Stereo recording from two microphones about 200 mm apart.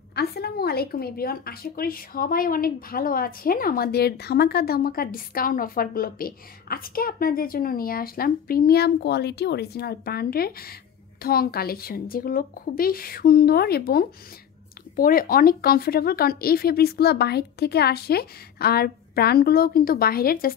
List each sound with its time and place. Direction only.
0.1 s a woman's voice: 55° left (ahead or behind)